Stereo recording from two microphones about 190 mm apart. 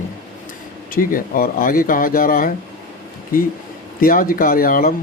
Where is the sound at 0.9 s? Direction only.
50° left (ahead or behind).